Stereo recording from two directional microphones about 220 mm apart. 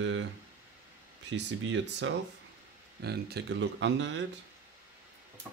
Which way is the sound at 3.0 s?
45° right (ahead or behind).